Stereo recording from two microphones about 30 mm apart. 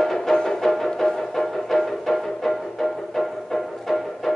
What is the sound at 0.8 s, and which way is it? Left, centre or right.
Music, centre.